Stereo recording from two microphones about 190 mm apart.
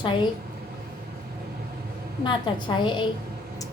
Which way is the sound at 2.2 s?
25° left (ahead or behind).